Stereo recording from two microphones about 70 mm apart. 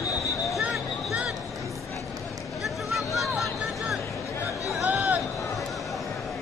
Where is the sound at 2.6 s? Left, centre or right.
Centre.